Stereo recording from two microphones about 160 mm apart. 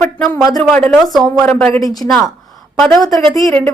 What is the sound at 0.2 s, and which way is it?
Speech, centre (ahead or behind).